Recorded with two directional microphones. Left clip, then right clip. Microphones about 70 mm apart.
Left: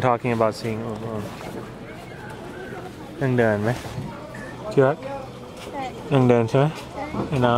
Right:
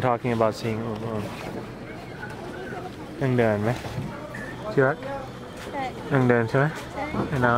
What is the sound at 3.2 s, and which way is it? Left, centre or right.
Speech, left.